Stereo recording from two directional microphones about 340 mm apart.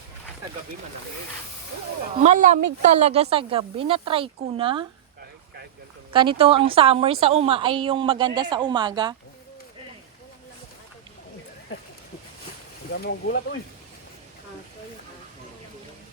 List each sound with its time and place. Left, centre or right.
2.1 s speech: right
6.1 s speech: centre
12.9 s speech: left